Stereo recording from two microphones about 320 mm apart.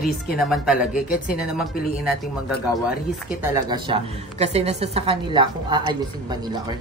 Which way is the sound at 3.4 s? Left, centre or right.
Centre.